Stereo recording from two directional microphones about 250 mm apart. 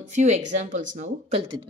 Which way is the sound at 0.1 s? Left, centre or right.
Right.